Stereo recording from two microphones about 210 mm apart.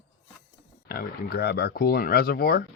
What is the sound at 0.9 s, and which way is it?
Speech, 45° left (ahead or behind).